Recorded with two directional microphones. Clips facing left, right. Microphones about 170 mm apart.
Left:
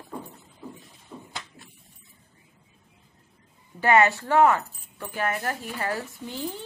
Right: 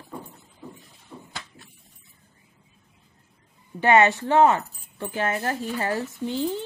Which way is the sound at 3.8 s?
20° right (ahead or behind).